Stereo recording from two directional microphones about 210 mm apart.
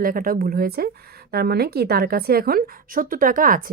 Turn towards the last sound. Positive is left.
turn(degrees=-40)  # may be behind; listen again after turning